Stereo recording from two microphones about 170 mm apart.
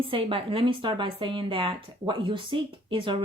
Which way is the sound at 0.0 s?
30° right (ahead or behind).